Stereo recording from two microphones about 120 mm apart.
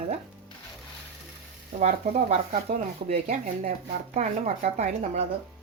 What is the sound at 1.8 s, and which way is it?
Speech, 70° right (ahead or behind).